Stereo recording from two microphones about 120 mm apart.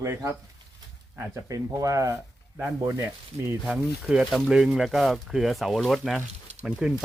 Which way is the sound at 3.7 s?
5° right (ahead or behind).